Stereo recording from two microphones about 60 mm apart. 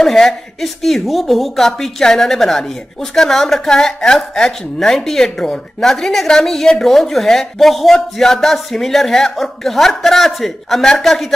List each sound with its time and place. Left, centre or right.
0.0 s a woman's voice: centre